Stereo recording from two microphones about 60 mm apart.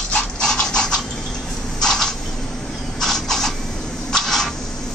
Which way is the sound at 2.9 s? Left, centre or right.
Centre.